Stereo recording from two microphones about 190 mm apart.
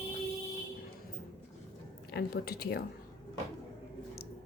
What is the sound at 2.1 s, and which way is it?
Speech, 55° left (ahead or behind).